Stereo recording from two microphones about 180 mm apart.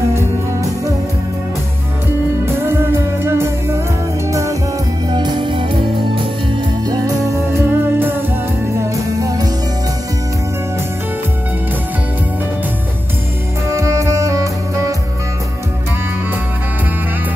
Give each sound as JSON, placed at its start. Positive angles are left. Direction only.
{"t": 0.1, "sound": "music", "side_deg": -20}
{"t": 2.4, "sound": "music", "side_deg": -15}
{"t": 7.5, "sound": "music", "side_deg": -10}
{"t": 13.7, "sound": "music", "side_deg": -15}